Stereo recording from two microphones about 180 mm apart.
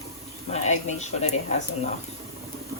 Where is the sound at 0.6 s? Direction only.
40° left (ahead or behind).